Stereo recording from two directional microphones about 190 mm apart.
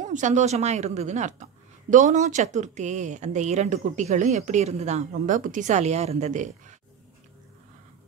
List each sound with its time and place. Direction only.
0.0 s a woman's voice: 40° right (ahead or behind)